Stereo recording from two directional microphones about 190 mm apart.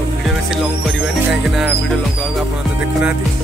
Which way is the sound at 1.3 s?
Centre (ahead or behind).